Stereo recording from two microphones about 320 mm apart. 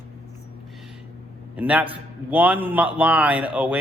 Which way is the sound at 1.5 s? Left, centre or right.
Centre.